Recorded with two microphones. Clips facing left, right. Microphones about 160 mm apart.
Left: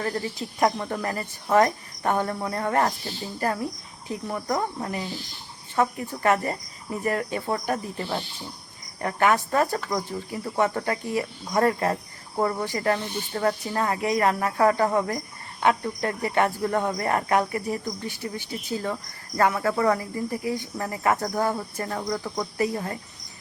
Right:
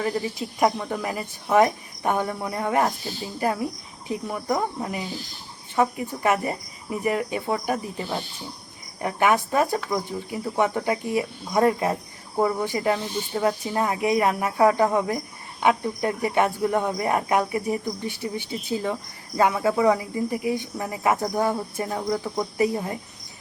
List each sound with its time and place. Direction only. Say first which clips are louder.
0.0 s speech: right 2 dB; 10° right (ahead or behind)
0.8 s speech: right 1 dB; 5° right (ahead or behind)